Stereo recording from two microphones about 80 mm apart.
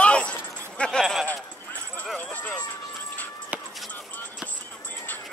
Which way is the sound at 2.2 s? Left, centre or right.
Centre.